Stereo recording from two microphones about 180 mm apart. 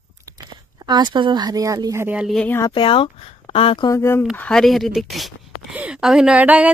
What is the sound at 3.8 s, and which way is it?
Speech, 15° left (ahead or behind).